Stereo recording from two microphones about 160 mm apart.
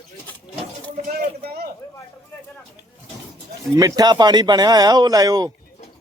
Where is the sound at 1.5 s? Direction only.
70° right (ahead or behind).